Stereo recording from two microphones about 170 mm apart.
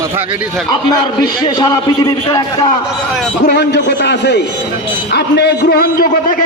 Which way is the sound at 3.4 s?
80° left.